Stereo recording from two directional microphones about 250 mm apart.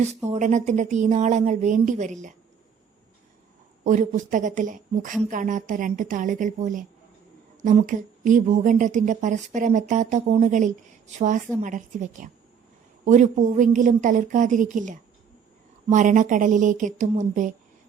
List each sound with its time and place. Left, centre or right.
0.3 s speech: right
3.8 s a woman's voice: right